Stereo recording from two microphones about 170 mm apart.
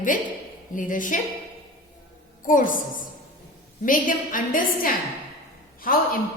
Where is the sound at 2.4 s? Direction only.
50° left (ahead or behind).